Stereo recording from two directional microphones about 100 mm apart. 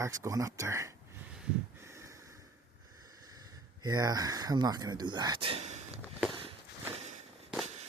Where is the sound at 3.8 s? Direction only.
40° right (ahead or behind).